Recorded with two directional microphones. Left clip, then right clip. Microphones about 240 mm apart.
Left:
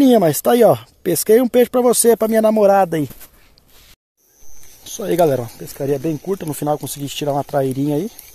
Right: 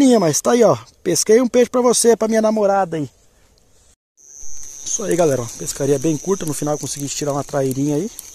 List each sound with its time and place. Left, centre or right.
0.0 s speech: centre
5.0 s speech: centre
5.6 s speech: right
6.4 s speech: centre